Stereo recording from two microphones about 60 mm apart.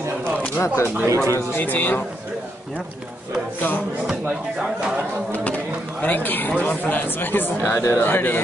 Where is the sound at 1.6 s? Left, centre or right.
Left.